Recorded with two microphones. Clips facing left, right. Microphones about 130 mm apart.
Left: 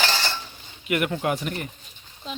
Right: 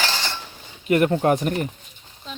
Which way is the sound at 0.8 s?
35° right (ahead or behind).